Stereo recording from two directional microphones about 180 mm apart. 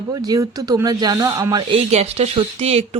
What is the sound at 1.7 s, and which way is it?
Speech, 35° right (ahead or behind).